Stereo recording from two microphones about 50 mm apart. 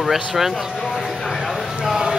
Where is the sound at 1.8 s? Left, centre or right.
Centre.